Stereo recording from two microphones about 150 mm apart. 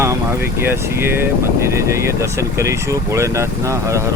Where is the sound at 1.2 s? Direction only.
20° right (ahead or behind).